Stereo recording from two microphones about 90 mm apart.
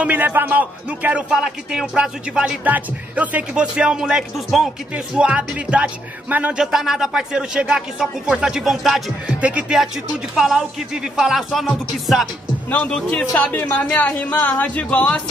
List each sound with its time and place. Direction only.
0.0 s speech: 20° right (ahead or behind); by 4.6 s centre (ahead or behind)
4.9 s speech: 15° right (ahead or behind)
9.4 s speech: 15° right (ahead or behind)
12.6 s speech: 15° left (ahead or behind)